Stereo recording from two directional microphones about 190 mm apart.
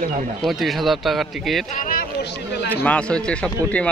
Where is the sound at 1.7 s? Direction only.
50° left (ahead or behind).